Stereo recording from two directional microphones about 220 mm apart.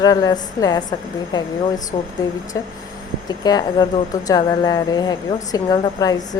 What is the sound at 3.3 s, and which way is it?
Speech, 15° left (ahead or behind).